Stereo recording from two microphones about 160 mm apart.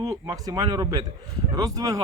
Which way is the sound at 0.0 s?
25° right (ahead or behind).